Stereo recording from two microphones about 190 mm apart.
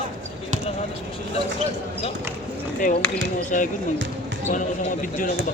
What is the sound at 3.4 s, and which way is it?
Speech, 40° left (ahead or behind).